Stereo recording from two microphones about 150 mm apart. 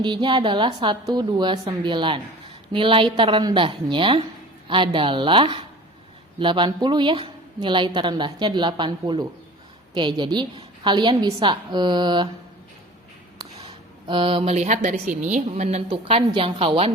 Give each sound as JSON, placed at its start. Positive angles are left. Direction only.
{"t": 0.0, "sound": "a woman's voice", "side_deg": -30}
{"t": 14.1, "sound": "a woman's voice", "side_deg": -35}
{"t": 15.9, "sound": "a woman's voice", "side_deg": -35}